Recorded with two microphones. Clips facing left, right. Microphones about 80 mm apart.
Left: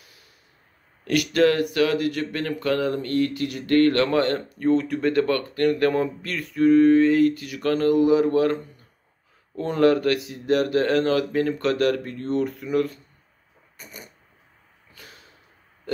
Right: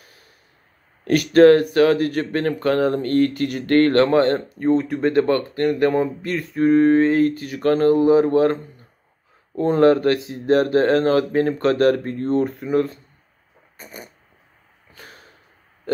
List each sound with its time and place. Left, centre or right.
0.0 s snort: right
1.0 s speech: right
13.7 s a sound: right